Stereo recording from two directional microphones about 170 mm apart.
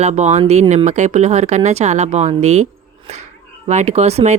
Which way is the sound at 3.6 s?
40° right (ahead or behind).